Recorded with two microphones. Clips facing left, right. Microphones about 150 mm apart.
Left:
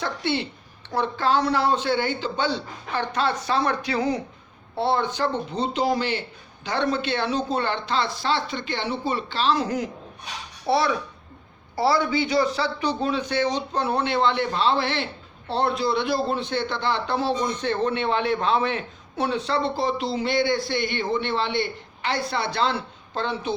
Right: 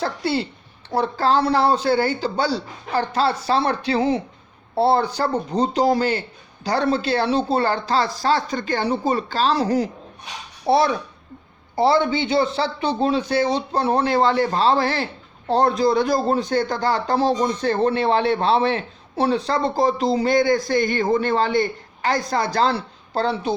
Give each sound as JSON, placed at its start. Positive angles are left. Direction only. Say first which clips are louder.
{"t": 0.0, "sound": "a man's voice", "louder": "right 3 dB", "side_deg": -35}